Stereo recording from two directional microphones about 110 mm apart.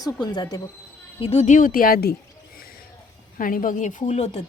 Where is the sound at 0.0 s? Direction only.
40° left (ahead or behind).